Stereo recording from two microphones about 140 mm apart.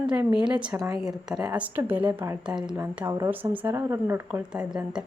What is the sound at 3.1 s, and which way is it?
Speech, 25° right (ahead or behind).